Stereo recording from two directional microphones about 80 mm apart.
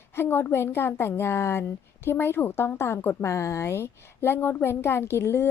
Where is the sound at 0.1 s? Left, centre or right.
Left.